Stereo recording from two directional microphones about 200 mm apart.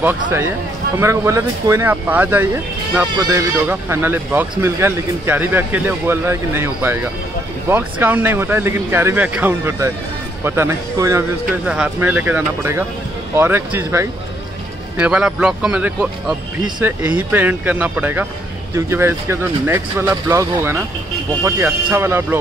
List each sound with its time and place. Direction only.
0.9 s speech: 15° right (ahead or behind)
3.2 s speech: 20° right (ahead or behind)